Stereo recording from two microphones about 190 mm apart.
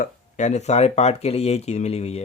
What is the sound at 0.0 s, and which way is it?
Speech, 40° left (ahead or behind).